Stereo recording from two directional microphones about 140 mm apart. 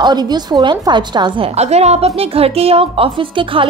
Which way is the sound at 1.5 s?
50° right (ahead or behind).